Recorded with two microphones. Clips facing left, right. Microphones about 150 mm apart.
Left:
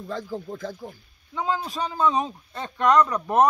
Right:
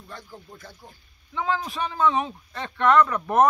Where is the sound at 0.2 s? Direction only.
90° left.